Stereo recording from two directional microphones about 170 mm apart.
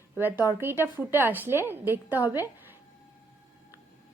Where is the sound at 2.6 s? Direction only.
10° right (ahead or behind).